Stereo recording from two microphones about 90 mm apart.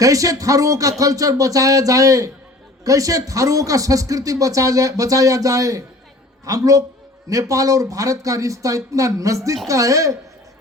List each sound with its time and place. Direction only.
0.0 s a woman's voice: 40° right (ahead or behind)